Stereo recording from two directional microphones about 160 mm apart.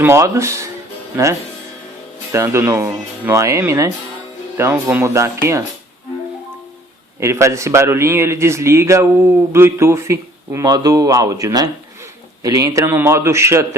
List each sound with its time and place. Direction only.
0.0 s a man's voice: 15° right (ahead or behind)
7.2 s a man's voice: 20° right (ahead or behind)